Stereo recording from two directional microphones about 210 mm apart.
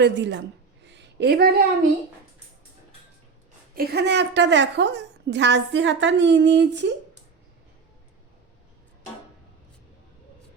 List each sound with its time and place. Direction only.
0.0 s a woman's voice: 55° right (ahead or behind)
0.9 s a sound: 55° right (ahead or behind)
3.8 s a woman's voice: 55° right (ahead or behind)